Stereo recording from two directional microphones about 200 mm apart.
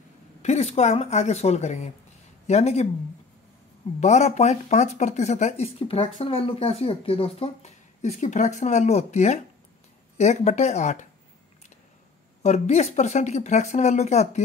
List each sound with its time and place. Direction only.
0.4 s speech: 35° left (ahead or behind)
4.0 s speech: 35° left (ahead or behind)
12.4 s speech: 35° left (ahead or behind)